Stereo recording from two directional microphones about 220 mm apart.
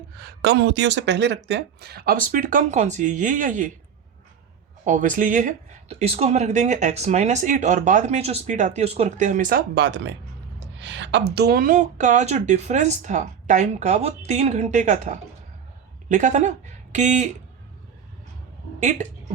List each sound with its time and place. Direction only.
0.2 s speech: 50° right (ahead or behind)
4.9 s a woman's voice: 35° right (ahead or behind)
18.8 s a woman's voice: 35° right (ahead or behind)